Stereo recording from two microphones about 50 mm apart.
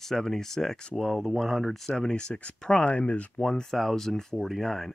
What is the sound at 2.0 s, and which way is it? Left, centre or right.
Speech, centre.